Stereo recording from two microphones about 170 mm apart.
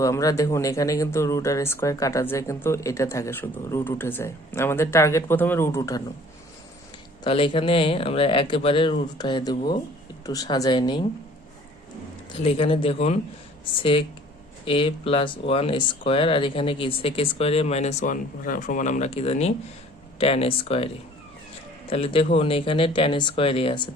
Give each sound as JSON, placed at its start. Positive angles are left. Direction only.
{"t": 0.0, "sound": "speech", "side_deg": 20}
{"t": 7.3, "sound": "speech", "side_deg": 30}
{"t": 12.4, "sound": "speech", "side_deg": 35}
{"t": 14.6, "sound": "speech", "side_deg": 30}